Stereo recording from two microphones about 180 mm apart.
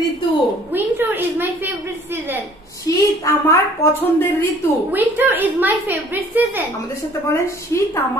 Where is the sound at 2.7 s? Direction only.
20° left (ahead or behind).